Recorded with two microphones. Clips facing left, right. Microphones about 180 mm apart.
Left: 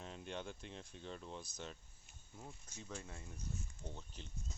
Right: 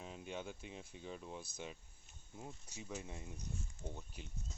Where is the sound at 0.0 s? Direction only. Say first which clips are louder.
Right 1 dB; 5° right (ahead or behind).